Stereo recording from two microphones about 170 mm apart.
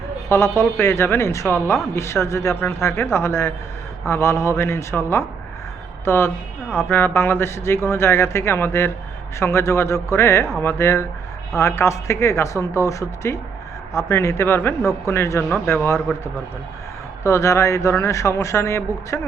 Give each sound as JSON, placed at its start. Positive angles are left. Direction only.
{"t": 0.3, "sound": "a man's voice", "side_deg": 15}
{"t": 17.2, "sound": "a man's voice", "side_deg": 15}